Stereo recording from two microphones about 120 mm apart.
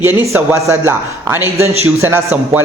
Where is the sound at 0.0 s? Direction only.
20° right (ahead or behind).